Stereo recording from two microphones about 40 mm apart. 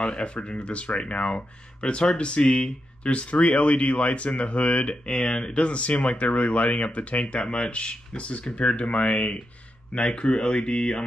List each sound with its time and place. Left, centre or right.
0.0 s speech: left
7.3 s speech: centre; by 9.4 s left
9.9 s speech: left